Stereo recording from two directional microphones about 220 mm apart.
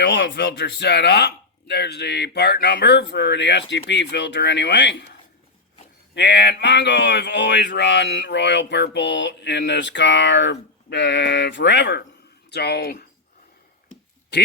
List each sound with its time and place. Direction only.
0.0 s speech: 50° left (ahead or behind)
6.1 s speech: 50° left (ahead or behind)